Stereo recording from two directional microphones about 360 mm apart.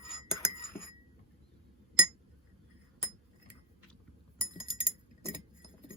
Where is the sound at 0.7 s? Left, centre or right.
Centre.